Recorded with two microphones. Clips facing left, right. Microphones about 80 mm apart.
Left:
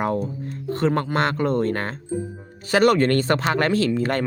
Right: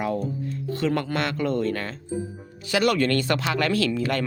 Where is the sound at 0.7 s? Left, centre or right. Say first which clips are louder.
Left 4 dB; left.